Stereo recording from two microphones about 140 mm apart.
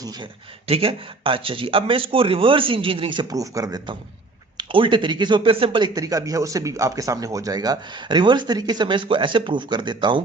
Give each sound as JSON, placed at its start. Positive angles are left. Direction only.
{"t": 0.7, "sound": "a man's voice", "side_deg": -40}